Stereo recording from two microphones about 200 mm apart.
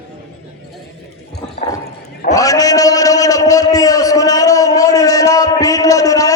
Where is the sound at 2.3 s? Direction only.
15° left (ahead or behind).